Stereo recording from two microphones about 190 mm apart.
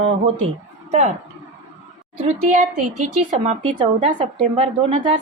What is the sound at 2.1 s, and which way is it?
Speech, 35° right (ahead or behind).